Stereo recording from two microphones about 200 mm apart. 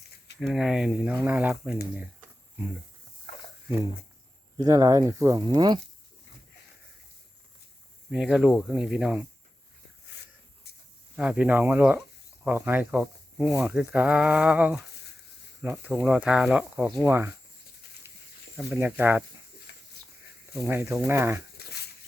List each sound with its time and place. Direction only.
0.3 s speech: centre (ahead or behind)
2.0 s a sound: 10° right (ahead or behind)
4.5 s speech: 15° right (ahead or behind)
8.1 s speech: 5° right (ahead or behind)
11.2 s speech: 5° right (ahead or behind)
18.0 s a sound: 10° right (ahead or behind)
18.5 s speech: 5° right (ahead or behind)
20.5 s speech: 10° right (ahead or behind)